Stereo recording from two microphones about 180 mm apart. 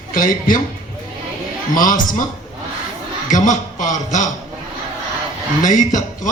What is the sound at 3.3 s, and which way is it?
Speech, 45° left (ahead or behind).